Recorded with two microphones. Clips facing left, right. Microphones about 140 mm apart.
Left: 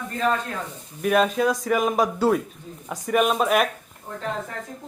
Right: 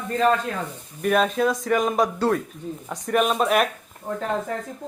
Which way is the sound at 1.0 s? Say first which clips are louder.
Even; centre (ahead or behind).